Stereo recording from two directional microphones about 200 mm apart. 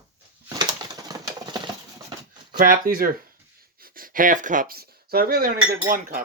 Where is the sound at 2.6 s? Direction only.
45° right (ahead or behind).